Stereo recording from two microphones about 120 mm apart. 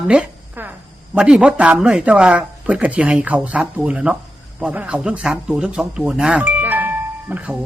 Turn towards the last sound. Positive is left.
turn(degrees=-10)  # may be behind; listen again after turning